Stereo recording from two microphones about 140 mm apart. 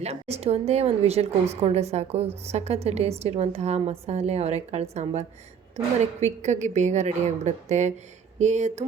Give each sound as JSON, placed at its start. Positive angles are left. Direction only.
{"t": 0.0, "sound": "a woman's voice", "side_deg": -50}